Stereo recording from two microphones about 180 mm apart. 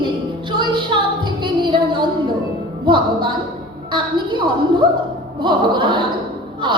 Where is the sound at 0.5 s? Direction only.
25° right (ahead or behind).